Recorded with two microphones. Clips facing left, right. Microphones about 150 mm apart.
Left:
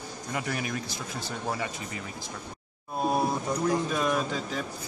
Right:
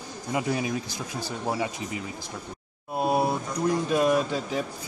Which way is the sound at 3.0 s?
10° right (ahead or behind).